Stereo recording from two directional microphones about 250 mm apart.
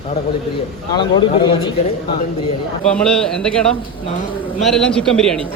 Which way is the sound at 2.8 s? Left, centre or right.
Centre.